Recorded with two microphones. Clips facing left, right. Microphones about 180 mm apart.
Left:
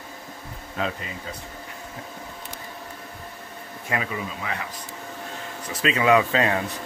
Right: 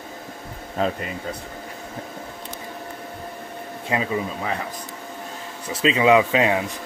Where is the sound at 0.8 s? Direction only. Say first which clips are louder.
Right 5 dB; 40° right (ahead or behind).